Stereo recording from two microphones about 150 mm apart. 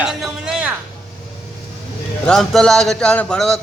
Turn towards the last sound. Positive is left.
turn(degrees=5)  # may be behind; listen again after turning